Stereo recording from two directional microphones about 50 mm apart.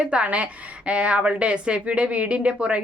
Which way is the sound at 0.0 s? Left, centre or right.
Right.